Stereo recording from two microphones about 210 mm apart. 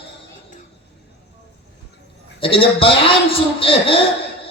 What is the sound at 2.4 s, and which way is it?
A man's voice, 25° left (ahead or behind).